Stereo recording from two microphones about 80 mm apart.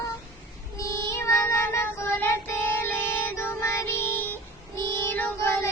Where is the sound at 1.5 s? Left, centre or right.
Left.